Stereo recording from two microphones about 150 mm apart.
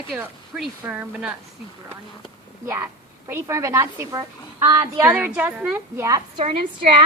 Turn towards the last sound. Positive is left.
turn(degrees=-40)  # may be behind; listen again after turning